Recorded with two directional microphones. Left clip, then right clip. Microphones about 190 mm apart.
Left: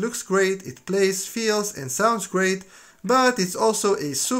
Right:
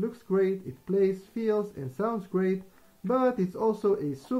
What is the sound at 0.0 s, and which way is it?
Speech, 20° left (ahead or behind).